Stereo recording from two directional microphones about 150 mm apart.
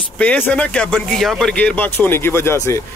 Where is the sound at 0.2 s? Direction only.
5° left (ahead or behind).